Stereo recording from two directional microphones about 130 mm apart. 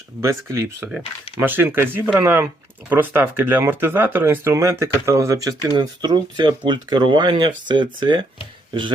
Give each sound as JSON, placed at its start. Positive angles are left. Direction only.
{"t": 0.2, "sound": "speech", "side_deg": -20}